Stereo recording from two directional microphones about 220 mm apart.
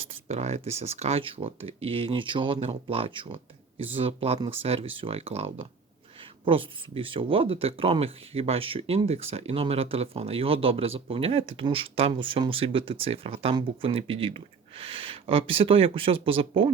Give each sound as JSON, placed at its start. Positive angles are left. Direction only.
{"t": 0.1, "sound": "speech", "side_deg": -30}